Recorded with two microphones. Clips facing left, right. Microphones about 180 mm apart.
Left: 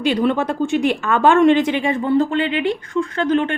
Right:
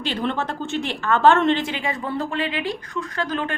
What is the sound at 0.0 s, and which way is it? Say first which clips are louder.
A woman's voice: left 7 dB; 15° left (ahead or behind).